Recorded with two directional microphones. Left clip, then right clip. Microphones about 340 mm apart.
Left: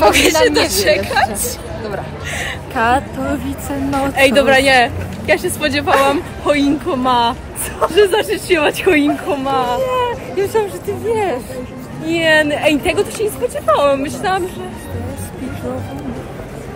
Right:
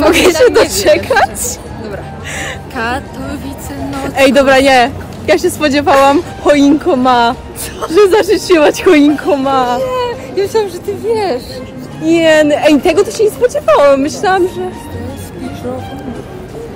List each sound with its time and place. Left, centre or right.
0.1 s speech: right
2.7 s speech: centre
4.1 s speech: right
9.8 s hubbub: centre
12.1 s speech: right